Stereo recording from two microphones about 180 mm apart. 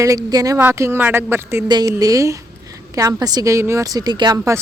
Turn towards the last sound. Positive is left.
turn(degrees=-20)  # may be behind; listen again after turning